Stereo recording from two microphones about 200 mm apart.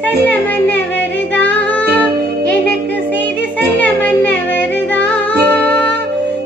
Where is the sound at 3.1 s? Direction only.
10° left (ahead or behind).